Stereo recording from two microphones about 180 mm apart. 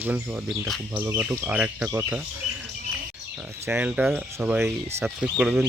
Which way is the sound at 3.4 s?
10° right (ahead or behind).